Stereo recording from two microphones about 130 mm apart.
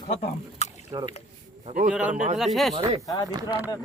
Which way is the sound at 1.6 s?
65° right (ahead or behind).